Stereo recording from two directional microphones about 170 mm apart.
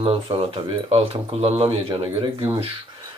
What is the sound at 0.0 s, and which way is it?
Speech, 35° right (ahead or behind).